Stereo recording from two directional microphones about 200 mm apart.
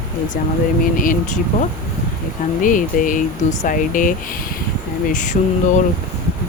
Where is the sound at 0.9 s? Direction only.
40° left (ahead or behind).